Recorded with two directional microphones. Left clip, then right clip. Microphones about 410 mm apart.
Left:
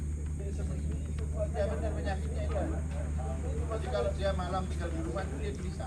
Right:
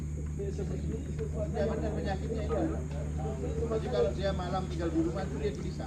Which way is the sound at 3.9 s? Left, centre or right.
Right.